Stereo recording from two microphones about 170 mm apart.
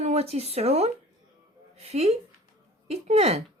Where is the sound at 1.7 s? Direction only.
35° right (ahead or behind).